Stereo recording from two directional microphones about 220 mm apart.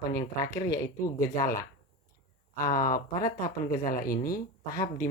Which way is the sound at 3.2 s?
40° left (ahead or behind).